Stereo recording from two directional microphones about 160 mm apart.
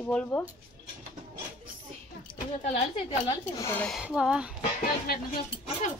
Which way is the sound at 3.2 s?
20° left (ahead or behind).